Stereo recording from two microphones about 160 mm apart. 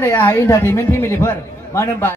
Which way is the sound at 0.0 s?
15° left (ahead or behind).